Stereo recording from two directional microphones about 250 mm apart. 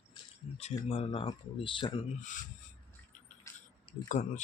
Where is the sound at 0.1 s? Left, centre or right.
Left.